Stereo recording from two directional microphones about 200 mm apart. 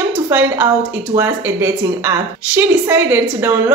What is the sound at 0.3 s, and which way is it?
A woman's voice, 10° right (ahead or behind).